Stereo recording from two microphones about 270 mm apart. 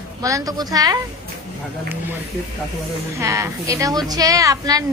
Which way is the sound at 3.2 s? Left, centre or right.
Centre.